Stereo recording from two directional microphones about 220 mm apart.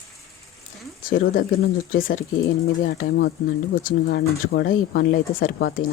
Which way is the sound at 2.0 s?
40° left (ahead or behind).